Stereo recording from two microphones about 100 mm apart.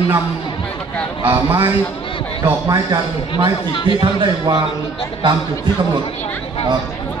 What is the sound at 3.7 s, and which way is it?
Speech, 55° left (ahead or behind).